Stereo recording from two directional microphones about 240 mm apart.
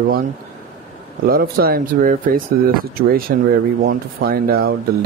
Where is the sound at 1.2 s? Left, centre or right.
Right.